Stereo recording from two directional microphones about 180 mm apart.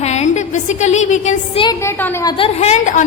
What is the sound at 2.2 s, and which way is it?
Speech, 30° left (ahead or behind).